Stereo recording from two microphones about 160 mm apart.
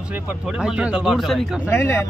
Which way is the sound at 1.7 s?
15° left (ahead or behind).